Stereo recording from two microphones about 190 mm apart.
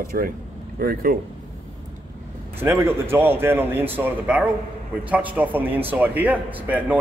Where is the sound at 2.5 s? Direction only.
10° right (ahead or behind).